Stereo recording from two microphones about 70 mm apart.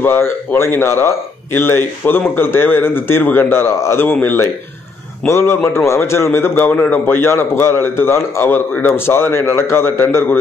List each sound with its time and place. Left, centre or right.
0.0 s speech: left